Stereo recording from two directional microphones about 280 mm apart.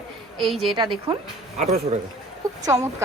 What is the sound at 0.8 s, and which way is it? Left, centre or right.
Speech, centre.